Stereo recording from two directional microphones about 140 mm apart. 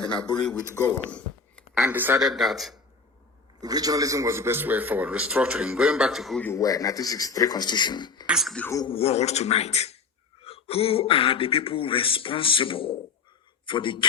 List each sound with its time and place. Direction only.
0.7 s speech: 15° left (ahead or behind)
1.7 s a man's voice: 10° right (ahead or behind)
2.2 s speech: centre (ahead or behind)
3.6 s a man's voice: 25° right (ahead or behind); by 6.4 s centre (ahead or behind)
6.4 s speech: 20° left (ahead or behind)
8.3 s speech: centre (ahead or behind)
8.9 s speech: 45° left (ahead or behind)